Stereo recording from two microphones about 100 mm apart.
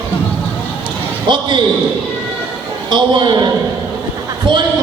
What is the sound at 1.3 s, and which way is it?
Basketball bounce, 55° right (ahead or behind).